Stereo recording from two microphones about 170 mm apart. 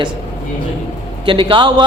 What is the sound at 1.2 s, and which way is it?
Speech, 30° right (ahead or behind).